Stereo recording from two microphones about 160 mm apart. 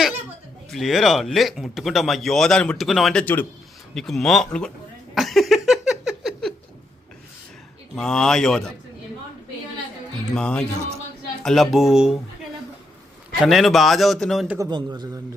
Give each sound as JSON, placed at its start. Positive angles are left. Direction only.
{"t": 0.7, "sound": "speech", "side_deg": 0}
{"t": 5.1, "sound": "a sound", "side_deg": 0}
{"t": 7.9, "sound": "speech", "side_deg": 5}
{"t": 10.3, "sound": "speech", "side_deg": 5}
{"t": 13.4, "sound": "speech", "side_deg": 0}
{"t": 14.6, "sound": "a man's voice", "side_deg": -25}